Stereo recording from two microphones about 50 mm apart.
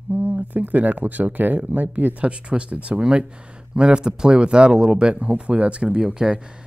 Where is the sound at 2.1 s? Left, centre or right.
Right.